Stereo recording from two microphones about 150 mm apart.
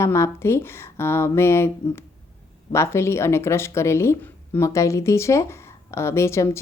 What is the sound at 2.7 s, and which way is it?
Speech, 20° left (ahead or behind).